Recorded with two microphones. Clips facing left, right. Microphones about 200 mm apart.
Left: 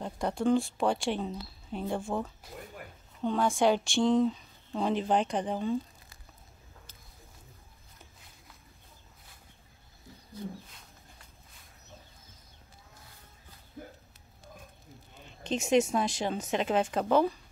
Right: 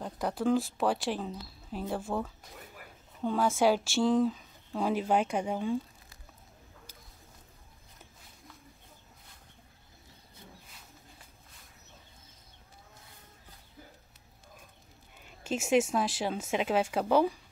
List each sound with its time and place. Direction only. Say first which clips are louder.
0.0 s speech: left 1 dB; 5° right (ahead or behind)
13.8 s a sound: left 8 dB; 55° left (ahead or behind)
15.2 s speech: left 1 dB; 5° right (ahead or behind)